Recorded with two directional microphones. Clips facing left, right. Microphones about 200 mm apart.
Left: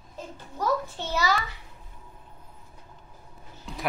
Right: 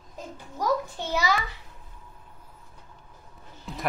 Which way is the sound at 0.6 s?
15° right (ahead or behind).